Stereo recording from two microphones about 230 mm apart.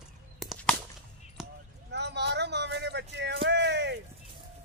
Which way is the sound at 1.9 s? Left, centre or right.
Right.